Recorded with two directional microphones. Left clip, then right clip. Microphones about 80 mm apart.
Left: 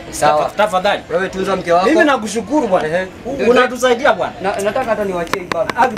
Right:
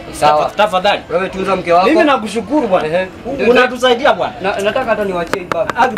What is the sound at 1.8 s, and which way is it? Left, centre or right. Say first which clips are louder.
A man's voice: right 1 dB; left.